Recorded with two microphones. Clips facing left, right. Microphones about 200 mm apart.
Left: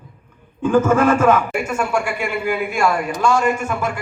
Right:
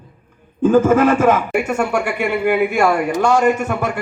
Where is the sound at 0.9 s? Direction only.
40° right (ahead or behind).